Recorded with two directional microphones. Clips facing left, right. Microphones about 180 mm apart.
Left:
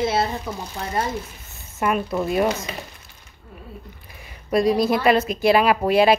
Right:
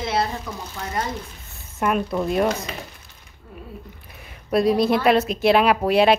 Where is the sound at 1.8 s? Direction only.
5° left (ahead or behind).